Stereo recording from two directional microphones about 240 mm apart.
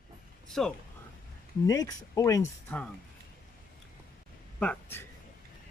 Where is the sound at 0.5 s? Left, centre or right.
Centre.